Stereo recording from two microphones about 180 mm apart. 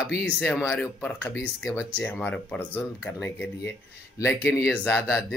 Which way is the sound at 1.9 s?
10° left (ahead or behind).